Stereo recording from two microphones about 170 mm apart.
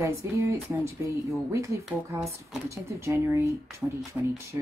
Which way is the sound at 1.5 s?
15° right (ahead or behind).